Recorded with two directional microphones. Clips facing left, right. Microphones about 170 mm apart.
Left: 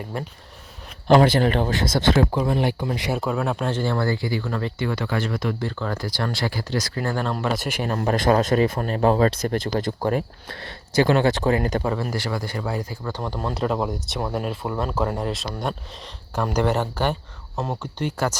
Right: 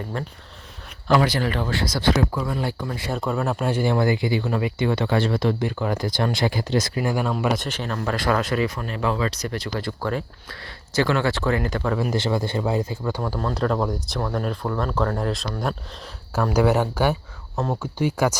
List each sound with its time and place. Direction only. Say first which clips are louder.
0.1 s speech: left 1 dB; 10° left (ahead or behind)
1.0 s speech: left 4 dB; 25° left (ahead or behind)
3.1 s speech: right 1 dB; 5° left (ahead or behind); by 5.6 s 30° right (ahead or behind)
5.6 s speech: right 3 dB; 15° right (ahead or behind); by 7.9 s 10° left (ahead or behind)
8.4 s speech: left 4 dB; 45° left (ahead or behind)
9.8 s speech: left 3 dB; 15° left (ahead or behind)
11.9 s speech: right 3 dB; 15° right (ahead or behind)
12.2 s speech: right 4 dB; 25° right (ahead or behind)
13.1 s speech: right 3 dB; 10° right (ahead or behind)
13.5 s speech: even; 5° left (ahead or behind)
14.2 s speech: even; 15° left (ahead or behind)
15.2 s speech: right 1 dB; centre (ahead or behind)